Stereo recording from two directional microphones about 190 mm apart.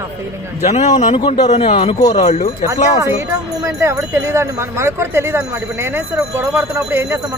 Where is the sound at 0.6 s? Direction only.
35° left (ahead or behind).